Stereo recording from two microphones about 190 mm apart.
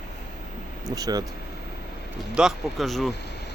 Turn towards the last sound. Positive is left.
turn(degrees=0)  # may be behind; listen again after turning